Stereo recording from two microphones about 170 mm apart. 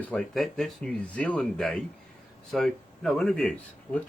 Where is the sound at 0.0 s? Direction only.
5° left (ahead or behind).